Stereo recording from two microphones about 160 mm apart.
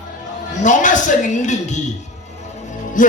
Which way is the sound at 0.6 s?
50° left (ahead or behind).